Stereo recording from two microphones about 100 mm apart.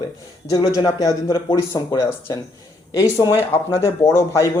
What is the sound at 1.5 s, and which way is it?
Speech, 45° left (ahead or behind).